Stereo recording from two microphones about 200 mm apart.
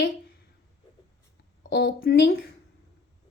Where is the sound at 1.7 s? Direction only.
60° left (ahead or behind).